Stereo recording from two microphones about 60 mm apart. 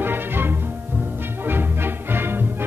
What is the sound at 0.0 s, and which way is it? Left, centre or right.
Music, right.